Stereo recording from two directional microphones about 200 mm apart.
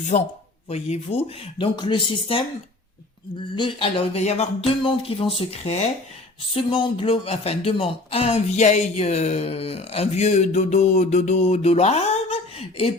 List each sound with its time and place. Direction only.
0.1 s speech: 25° left (ahead or behind)
3.5 s speech: 25° left (ahead or behind)